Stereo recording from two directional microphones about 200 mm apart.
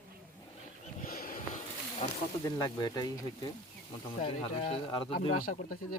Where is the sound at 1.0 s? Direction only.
45° left (ahead or behind).